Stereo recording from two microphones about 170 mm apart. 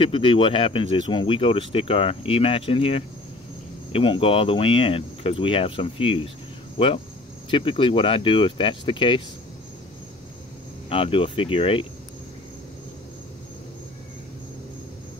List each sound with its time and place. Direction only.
0.0 s speech: 30° left (ahead or behind)
7.5 s speech: 30° left (ahead or behind)
10.9 s speech: 35° left (ahead or behind)